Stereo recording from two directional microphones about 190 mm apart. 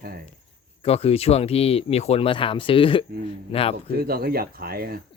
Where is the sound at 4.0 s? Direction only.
55° right (ahead or behind).